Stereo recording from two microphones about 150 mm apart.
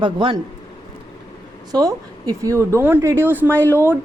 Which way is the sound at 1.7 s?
25° right (ahead or behind).